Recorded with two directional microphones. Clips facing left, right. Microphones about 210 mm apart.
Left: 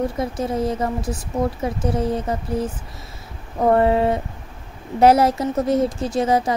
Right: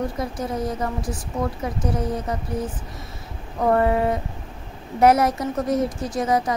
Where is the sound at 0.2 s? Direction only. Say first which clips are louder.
Left 4 dB; 25° left (ahead or behind).